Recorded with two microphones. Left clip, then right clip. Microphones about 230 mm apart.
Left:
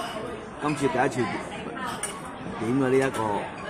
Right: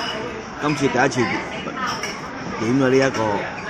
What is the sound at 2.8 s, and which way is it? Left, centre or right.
Speech, centre.